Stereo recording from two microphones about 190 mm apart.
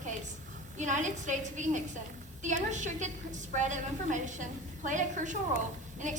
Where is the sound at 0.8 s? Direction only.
40° right (ahead or behind).